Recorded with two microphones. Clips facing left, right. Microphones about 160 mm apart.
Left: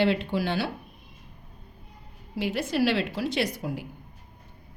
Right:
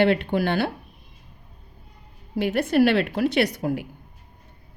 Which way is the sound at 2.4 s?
60° right (ahead or behind).